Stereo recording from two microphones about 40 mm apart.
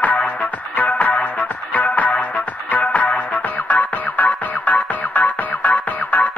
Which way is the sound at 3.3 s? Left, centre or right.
Left.